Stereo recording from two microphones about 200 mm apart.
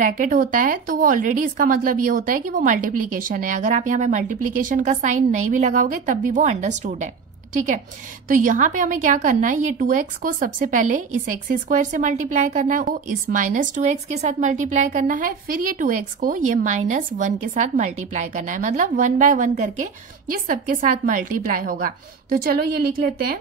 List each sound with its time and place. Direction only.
0.0 s a woman's voice: 40° right (ahead or behind)